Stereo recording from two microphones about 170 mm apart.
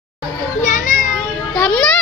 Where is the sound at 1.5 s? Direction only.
5° left (ahead or behind).